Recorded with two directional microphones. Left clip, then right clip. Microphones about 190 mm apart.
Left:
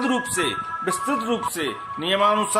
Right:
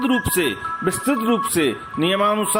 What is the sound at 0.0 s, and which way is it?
Speech, 35° right (ahead or behind).